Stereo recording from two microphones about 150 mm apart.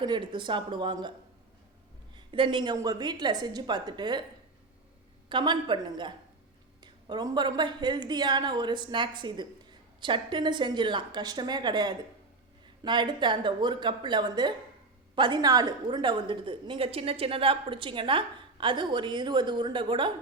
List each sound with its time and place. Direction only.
0.0 s a woman's voice: 30° right (ahead or behind)
2.1 s a woman's voice: 35° right (ahead or behind)
5.3 s a woman's voice: 30° right (ahead or behind)